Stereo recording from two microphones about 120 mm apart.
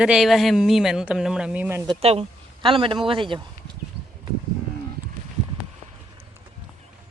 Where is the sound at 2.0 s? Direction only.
55° right (ahead or behind).